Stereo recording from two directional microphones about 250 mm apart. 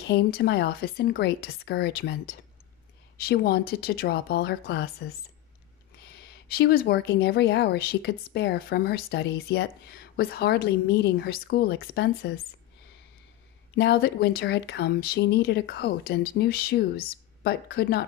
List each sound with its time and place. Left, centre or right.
0.0 s speech: left
3.3 s speech: left
6.1 s speech: left
13.7 s speech: left